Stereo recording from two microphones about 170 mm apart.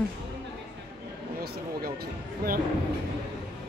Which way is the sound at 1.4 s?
60° right (ahead or behind).